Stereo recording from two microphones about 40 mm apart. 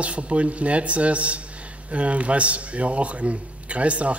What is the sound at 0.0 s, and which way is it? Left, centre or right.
A man's voice, right.